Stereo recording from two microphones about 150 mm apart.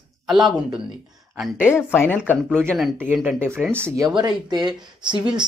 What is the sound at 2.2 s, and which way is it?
Speech, 10° right (ahead or behind).